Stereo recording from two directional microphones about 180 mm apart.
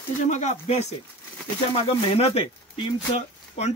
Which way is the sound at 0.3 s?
40° left (ahead or behind).